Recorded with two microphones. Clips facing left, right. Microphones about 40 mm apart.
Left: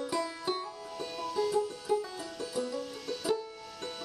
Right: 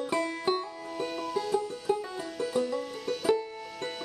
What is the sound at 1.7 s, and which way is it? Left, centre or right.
Music, right.